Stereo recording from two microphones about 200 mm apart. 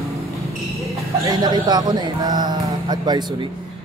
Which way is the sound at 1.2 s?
20° right (ahead or behind).